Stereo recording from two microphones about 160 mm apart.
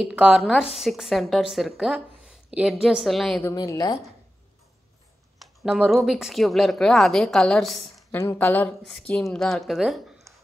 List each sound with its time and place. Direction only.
0.1 s a woman's voice: 5° right (ahead or behind)
3.4 s a woman's voice: 20° left (ahead or behind)
5.4 s a woman's voice: centre (ahead or behind)
8.1 s a woman's voice: 15° left (ahead or behind); by 10.2 s centre (ahead or behind)